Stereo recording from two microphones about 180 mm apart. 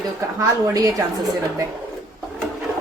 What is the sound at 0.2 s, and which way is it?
Speech, 20° right (ahead or behind).